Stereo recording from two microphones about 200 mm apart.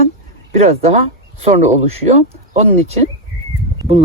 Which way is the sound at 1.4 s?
30° right (ahead or behind).